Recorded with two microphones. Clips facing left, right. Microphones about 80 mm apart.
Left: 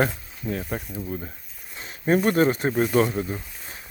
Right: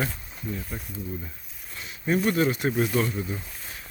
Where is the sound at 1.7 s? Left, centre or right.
Left.